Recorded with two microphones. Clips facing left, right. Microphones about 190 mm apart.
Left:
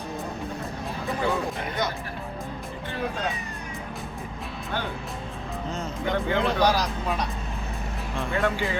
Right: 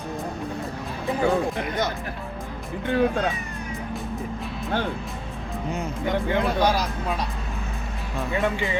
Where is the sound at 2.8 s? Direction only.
55° right (ahead or behind).